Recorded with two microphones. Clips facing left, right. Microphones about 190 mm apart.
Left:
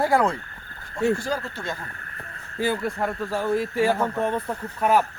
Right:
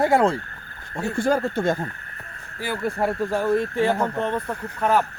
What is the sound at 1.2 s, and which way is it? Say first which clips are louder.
Speech: right 8 dB; 55° right (ahead or behind).